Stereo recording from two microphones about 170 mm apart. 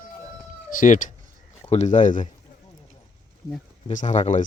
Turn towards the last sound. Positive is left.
turn(degrees=40)  # may be behind; listen again after turning